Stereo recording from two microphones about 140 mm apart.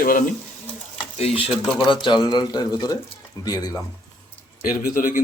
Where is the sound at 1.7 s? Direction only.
35° left (ahead or behind).